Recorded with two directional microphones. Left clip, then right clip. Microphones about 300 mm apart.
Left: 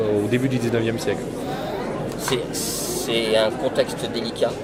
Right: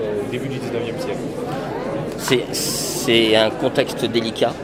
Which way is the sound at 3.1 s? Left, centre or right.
Right.